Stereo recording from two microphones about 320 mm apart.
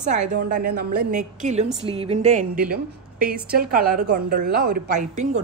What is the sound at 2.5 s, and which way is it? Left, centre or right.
Speech, centre.